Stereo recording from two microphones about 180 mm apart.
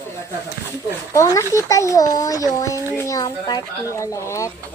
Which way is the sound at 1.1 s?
15° left (ahead or behind).